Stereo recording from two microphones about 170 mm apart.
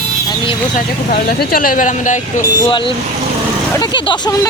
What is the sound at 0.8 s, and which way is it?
Speech, 65° left (ahead or behind).